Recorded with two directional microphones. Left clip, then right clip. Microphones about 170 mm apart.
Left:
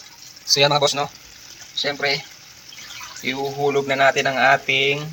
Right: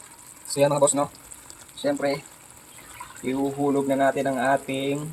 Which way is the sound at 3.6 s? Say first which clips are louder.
Left 5 dB; centre (ahead or behind).